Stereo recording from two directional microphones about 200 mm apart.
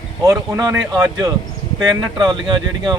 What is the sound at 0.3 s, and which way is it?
Speech, 15° right (ahead or behind).